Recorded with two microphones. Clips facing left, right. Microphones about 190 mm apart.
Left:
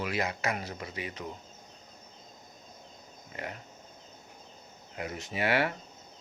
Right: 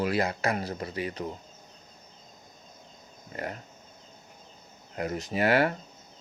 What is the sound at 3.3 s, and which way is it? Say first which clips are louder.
Speech: right 4 dB; 40° right (ahead or behind).